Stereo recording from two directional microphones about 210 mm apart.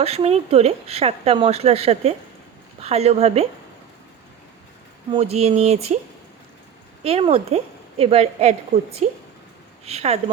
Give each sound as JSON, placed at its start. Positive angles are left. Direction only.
{"t": 0.0, "sound": "a woman's voice", "side_deg": -30}
{"t": 5.1, "sound": "speech", "side_deg": -30}
{"t": 7.0, "sound": "a woman's voice", "side_deg": -30}